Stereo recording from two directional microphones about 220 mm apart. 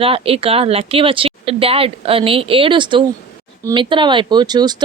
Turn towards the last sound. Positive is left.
turn(degrees=-20)  # may be behind; listen again after turning